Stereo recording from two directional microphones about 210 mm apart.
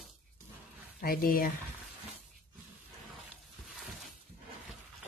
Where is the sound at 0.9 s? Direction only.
45° left (ahead or behind).